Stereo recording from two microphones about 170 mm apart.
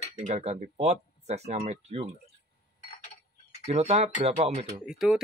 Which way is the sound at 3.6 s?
40° right (ahead or behind).